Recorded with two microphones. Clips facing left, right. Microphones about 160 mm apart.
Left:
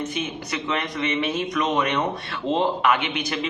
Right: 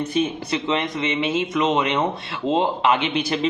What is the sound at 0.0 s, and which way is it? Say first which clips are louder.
A man's voice: right 6 dB; 35° right (ahead or behind).